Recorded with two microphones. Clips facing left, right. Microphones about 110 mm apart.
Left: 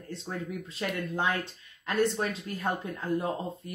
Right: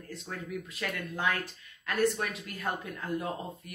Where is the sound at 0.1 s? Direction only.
30° left (ahead or behind).